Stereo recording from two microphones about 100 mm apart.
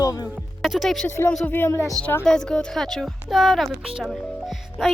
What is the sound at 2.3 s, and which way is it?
Speech, 5° left (ahead or behind).